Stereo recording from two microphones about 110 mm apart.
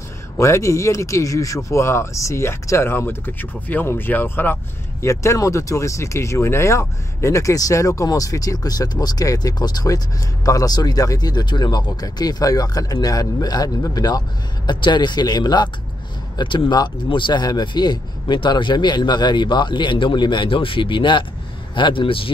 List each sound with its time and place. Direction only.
0.4 s speech: 25° left (ahead or behind); by 22.3 s 50° left (ahead or behind)